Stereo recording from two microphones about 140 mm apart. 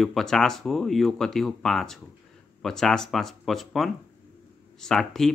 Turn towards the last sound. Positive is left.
turn(degrees=5)  # may be behind; listen again after turning